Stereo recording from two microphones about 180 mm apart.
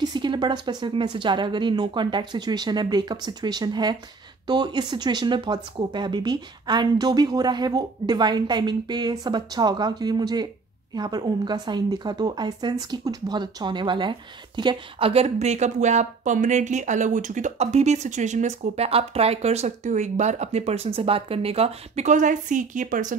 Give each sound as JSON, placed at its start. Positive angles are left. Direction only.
{"t": 0.0, "sound": "speech", "side_deg": -25}